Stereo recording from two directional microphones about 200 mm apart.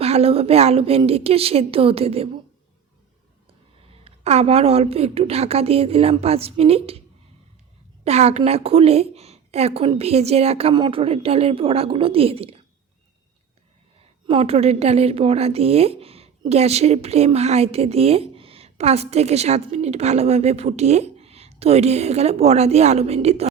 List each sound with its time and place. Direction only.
0.0 s a woman's voice: 30° right (ahead or behind)
4.0 s a woman's voice: 30° right (ahead or behind)
8.0 s a woman's voice: 30° right (ahead or behind)
14.3 s a woman's voice: 30° right (ahead or behind)